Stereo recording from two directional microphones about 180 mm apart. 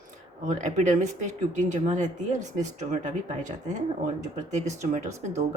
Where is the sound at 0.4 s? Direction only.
40° right (ahead or behind).